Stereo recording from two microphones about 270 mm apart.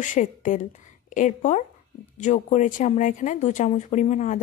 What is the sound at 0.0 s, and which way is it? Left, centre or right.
A woman's voice, left.